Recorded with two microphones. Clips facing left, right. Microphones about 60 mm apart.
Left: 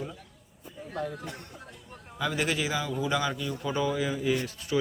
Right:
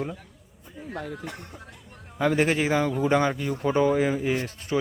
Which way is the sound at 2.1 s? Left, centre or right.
Right.